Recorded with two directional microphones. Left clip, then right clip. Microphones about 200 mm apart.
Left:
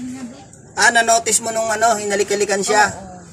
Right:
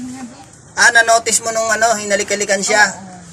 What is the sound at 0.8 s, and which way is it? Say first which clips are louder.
A man's voice: right 3 dB; centre (ahead or behind).